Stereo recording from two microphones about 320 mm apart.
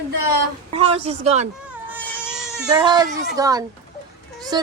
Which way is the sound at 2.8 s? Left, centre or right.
Centre.